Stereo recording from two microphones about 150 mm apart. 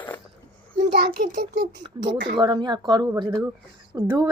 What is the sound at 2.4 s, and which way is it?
Speech, 30° right (ahead or behind).